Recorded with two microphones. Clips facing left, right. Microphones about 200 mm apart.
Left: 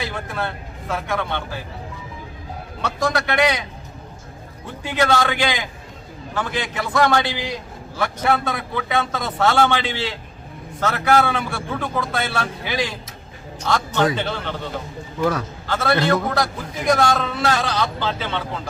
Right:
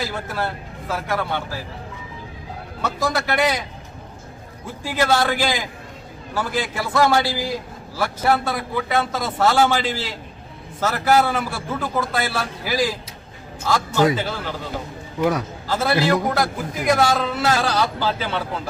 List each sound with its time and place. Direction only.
0.0 s a man's voice: 5° right (ahead or behind)
2.8 s a man's voice: centre (ahead or behind)
4.9 s a man's voice: 5° right (ahead or behind)
15.2 s a man's voice: 20° right (ahead or behind)
15.6 s a man's voice: 5° right (ahead or behind)